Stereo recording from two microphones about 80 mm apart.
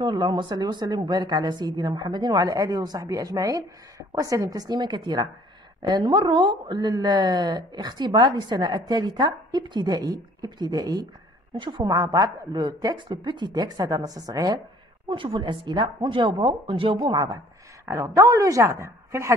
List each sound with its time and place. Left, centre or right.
0.0 s a woman's voice: right
6.9 s a woman's voice: right
15.0 s a woman's voice: right
17.8 s a woman's voice: right